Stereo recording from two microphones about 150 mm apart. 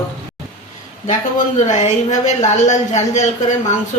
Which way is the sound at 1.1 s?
50° left (ahead or behind).